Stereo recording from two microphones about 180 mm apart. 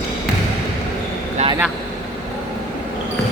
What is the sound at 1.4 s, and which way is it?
Vehicle, 35° right (ahead or behind).